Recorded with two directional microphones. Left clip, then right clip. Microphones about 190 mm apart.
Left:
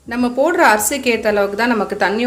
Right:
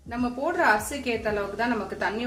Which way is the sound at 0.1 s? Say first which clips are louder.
Left 12 dB; 50° left (ahead or behind).